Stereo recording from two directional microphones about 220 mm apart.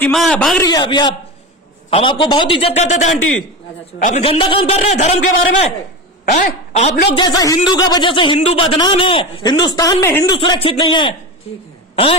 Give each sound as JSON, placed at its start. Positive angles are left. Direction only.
{"t": 0.0, "sound": "a man's voice", "side_deg": 0}
{"t": 0.7, "sound": "a woman's voice", "side_deg": 20}
{"t": 7.2, "sound": "speech", "side_deg": 15}
{"t": 10.3, "sound": "speech", "side_deg": 25}